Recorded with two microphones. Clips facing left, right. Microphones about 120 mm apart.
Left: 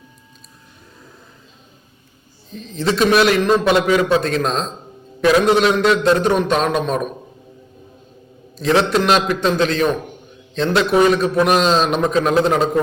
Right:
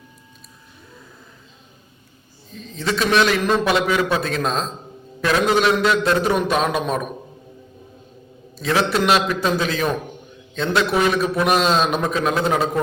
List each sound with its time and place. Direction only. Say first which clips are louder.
2.5 s a man's voice: left 4 dB; centre (ahead or behind)
8.5 s a man's voice: left 4 dB; centre (ahead or behind)